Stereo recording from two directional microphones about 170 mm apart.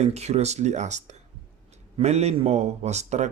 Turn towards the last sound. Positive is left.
turn(degrees=-40)  # may be behind; listen again after turning